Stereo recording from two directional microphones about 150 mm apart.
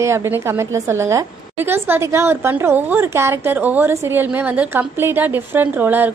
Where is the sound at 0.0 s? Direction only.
20° right (ahead or behind).